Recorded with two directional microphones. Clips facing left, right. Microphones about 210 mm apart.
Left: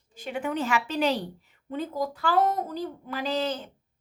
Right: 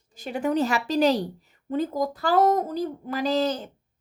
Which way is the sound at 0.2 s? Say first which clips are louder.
Right 5 dB; 40° right (ahead or behind).